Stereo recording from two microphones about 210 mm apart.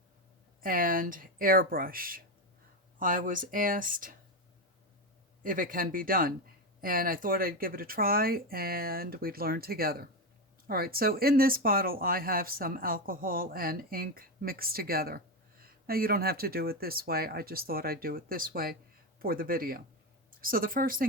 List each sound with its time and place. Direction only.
0.6 s speech: 40° right (ahead or behind)
5.4 s speech: 40° right (ahead or behind)